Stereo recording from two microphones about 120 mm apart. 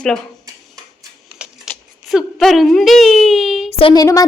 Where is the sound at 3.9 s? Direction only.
30° left (ahead or behind).